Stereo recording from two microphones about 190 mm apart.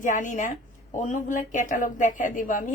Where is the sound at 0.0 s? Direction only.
40° left (ahead or behind).